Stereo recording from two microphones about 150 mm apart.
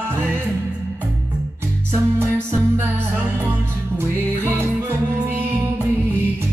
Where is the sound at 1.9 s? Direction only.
15° right (ahead or behind).